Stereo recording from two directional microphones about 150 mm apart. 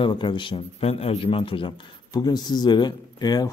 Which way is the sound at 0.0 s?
30° left (ahead or behind).